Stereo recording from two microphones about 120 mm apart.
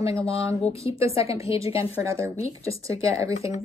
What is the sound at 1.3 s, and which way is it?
Speech, 25° right (ahead or behind).